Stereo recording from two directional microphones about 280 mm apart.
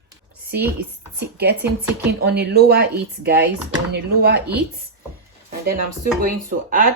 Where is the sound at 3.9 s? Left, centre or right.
Right.